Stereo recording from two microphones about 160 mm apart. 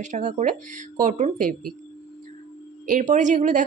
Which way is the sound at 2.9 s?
50° right (ahead or behind).